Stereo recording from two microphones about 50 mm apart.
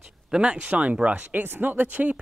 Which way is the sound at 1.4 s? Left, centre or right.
Right.